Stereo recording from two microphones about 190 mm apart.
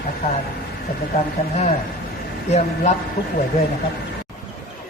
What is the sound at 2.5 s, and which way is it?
Speech, 35° left (ahead or behind).